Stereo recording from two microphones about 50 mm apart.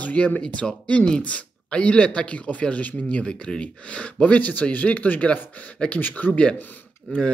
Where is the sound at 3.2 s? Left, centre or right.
Centre.